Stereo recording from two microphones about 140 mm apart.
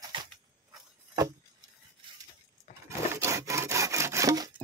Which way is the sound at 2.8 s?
20° right (ahead or behind).